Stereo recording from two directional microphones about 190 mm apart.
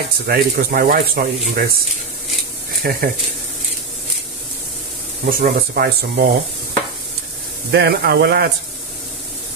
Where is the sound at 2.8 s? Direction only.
50° right (ahead or behind).